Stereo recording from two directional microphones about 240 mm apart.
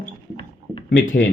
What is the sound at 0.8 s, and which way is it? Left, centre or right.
Speech, left.